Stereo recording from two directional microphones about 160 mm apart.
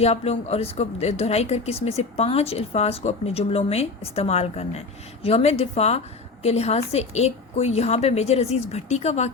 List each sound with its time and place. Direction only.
0.0 s speech: 40° left (ahead or behind)